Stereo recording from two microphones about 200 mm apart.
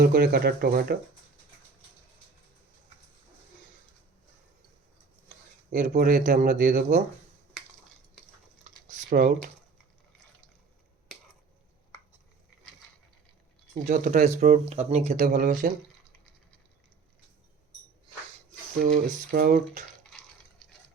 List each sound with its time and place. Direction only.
0.0 s speech: 50° right (ahead or behind)
5.7 s speech: 50° right (ahead or behind)
8.9 s a sound: 45° right (ahead or behind)
13.7 s speech: 40° right (ahead or behind)
18.8 s speech: 50° right (ahead or behind)